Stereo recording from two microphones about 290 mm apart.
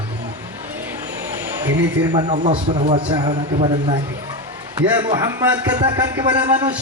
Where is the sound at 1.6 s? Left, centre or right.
Centre.